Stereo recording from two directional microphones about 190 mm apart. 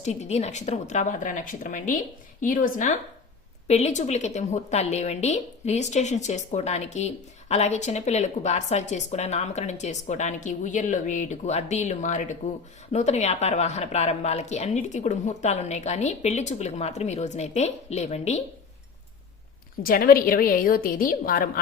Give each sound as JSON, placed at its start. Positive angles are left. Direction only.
{"t": 0.0, "sound": "a woman's voice", "side_deg": 35}
{"t": 19.8, "sound": "a woman's voice", "side_deg": 50}